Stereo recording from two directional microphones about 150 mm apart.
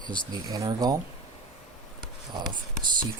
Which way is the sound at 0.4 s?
25° right (ahead or behind).